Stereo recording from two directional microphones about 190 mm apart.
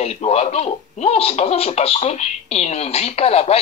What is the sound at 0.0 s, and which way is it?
Speech, 35° left (ahead or behind).